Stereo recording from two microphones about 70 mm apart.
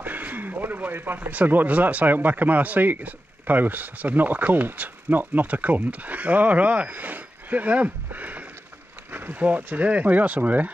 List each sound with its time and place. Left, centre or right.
0.0 s speech: right